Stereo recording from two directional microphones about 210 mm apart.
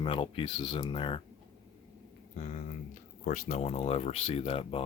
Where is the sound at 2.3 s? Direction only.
35° left (ahead or behind).